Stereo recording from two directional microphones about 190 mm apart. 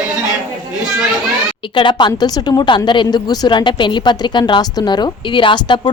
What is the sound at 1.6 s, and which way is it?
A woman's voice, 25° left (ahead or behind).